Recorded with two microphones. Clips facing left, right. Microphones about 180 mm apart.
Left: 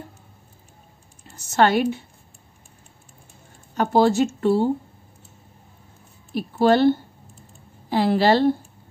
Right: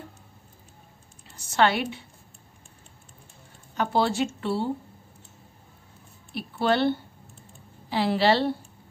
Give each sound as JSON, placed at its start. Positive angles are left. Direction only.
{"t": 1.2, "sound": "a woman's voice", "side_deg": 45}
{"t": 3.7, "sound": "a woman's voice", "side_deg": 45}
{"t": 6.3, "sound": "a woman's voice", "side_deg": 40}